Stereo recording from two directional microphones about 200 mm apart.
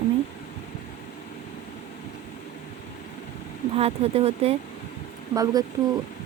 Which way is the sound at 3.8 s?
30° right (ahead or behind).